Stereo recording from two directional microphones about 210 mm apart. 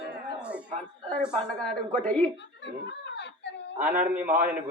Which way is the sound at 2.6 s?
55° left (ahead or behind).